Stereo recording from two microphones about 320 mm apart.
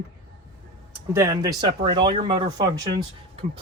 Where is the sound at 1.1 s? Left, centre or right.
Centre.